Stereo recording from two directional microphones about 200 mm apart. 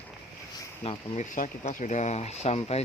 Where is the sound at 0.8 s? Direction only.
30° left (ahead or behind).